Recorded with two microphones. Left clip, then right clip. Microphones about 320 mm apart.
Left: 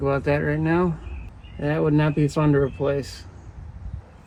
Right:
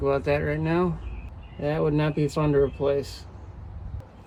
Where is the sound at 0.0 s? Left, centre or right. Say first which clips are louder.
Left 1 dB; left.